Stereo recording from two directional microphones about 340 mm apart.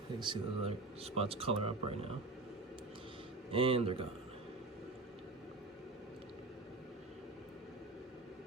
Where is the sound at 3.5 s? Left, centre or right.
Centre.